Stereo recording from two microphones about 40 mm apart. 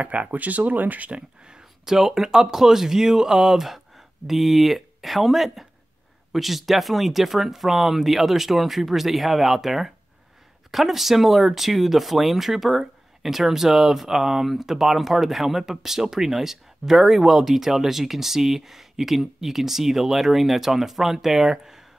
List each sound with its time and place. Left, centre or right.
0.0 s speech: right
1.4 s a sound: right
1.9 s speech: centre